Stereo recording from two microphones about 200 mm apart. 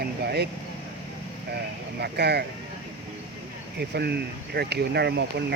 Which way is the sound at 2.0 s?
55° right (ahead or behind).